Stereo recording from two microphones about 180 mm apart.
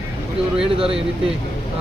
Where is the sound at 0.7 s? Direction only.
30° right (ahead or behind).